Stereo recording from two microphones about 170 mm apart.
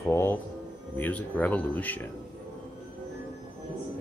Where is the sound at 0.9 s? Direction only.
10° left (ahead or behind).